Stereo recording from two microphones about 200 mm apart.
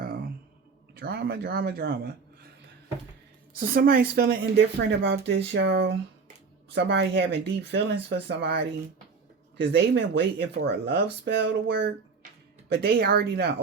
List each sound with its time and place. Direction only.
0.0 s a sound: 50° right (ahead or behind)
0.9 s speech: 55° right (ahead or behind)
3.5 s speech: 45° right (ahead or behind)